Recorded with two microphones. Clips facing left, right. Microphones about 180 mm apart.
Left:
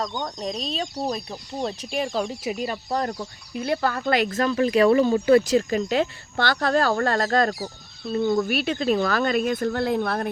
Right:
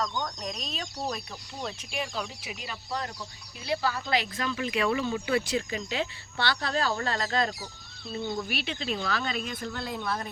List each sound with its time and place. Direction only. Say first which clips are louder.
0.0 s speech: left 4 dB; 25° left (ahead or behind); by 10.2 s 60° left (ahead or behind)